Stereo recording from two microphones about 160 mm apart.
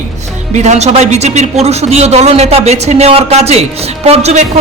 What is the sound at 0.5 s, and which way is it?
A woman's voice, 45° right (ahead or behind).